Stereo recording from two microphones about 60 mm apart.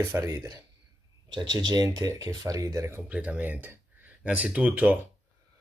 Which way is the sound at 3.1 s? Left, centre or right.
Right.